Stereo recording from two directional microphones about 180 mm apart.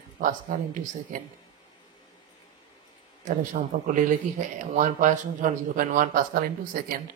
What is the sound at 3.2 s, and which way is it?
Speech, 45° right (ahead or behind).